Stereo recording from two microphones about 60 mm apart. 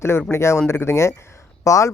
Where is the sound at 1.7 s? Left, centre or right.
Left.